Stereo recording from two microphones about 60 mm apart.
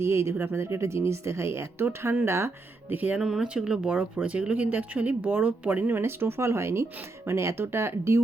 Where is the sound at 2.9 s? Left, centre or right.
Right.